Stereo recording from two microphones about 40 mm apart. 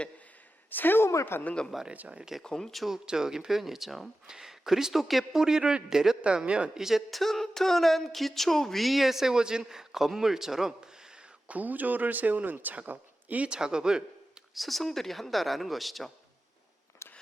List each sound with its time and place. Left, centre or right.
0.7 s speech: left
1.9 s speech: right
2.4 s speech: centre
2.9 s speech: centre
5.4 s speech: centre
6.2 s speech: right
6.7 s speech: centre
7.1 s a woman's voice: centre
11.4 s speech: right
12.9 s a sound: right
13.5 s speech: centre
14.5 s a woman's voice: centre